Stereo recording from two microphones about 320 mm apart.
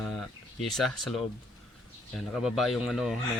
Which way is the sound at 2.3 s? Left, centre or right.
Centre.